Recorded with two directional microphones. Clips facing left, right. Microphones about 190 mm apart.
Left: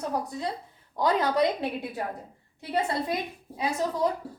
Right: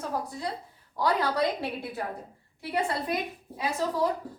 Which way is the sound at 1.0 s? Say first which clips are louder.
Left 2 dB; 20° left (ahead or behind).